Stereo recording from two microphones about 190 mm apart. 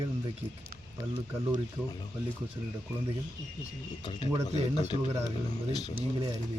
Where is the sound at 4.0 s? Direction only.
25° left (ahead or behind).